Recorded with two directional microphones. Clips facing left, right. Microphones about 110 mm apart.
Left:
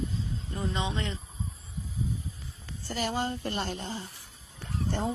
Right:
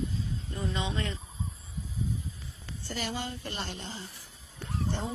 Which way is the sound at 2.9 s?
45° left (ahead or behind).